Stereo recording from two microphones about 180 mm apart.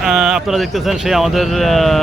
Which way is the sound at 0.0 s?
5° right (ahead or behind).